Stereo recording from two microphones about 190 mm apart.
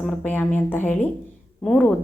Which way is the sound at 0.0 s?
5° left (ahead or behind).